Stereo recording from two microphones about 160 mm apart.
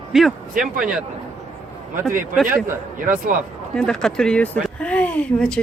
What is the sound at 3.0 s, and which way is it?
Speech, 60° right (ahead or behind).